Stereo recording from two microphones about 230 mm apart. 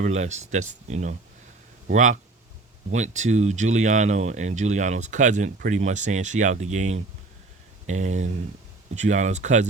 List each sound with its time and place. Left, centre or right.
0.0 s speech: right